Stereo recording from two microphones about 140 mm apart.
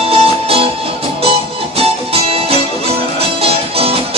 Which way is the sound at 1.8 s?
45° right (ahead or behind).